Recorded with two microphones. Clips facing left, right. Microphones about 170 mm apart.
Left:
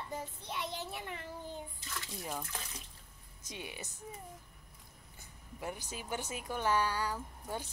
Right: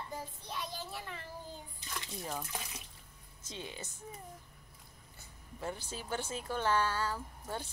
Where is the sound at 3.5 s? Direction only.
15° left (ahead or behind).